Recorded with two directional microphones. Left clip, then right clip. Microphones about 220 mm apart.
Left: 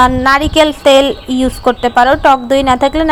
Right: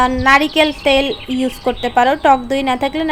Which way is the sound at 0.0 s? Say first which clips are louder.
Left 3 dB; 15° left (ahead or behind).